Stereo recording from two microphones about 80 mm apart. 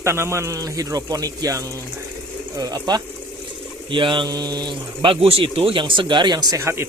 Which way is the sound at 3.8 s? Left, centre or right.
Right.